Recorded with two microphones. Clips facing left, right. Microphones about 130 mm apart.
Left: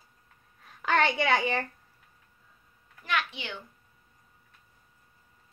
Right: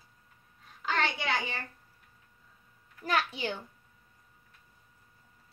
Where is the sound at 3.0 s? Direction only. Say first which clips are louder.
Right 2 dB; 40° right (ahead or behind).